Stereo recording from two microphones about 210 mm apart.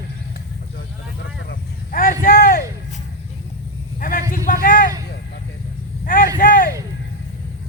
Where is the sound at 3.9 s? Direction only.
40° left (ahead or behind).